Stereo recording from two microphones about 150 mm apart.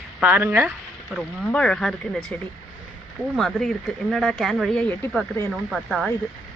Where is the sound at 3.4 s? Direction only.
Centre (ahead or behind).